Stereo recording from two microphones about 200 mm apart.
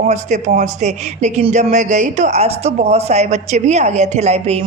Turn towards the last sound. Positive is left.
turn(degrees=-35)  # may be behind; listen again after turning